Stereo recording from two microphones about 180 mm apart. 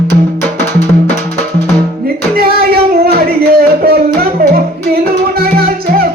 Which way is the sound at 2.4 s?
60° right (ahead or behind).